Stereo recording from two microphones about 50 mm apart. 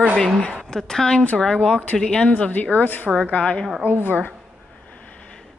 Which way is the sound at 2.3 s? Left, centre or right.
Left.